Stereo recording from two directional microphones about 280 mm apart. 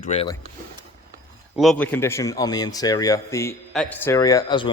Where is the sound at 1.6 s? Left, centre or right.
Centre.